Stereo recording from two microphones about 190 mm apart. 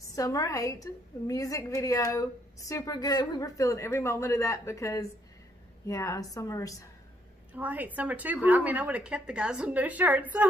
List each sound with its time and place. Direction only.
0.1 s speech: 15° left (ahead or behind)
7.5 s a woman's voice: 10° right (ahead or behind)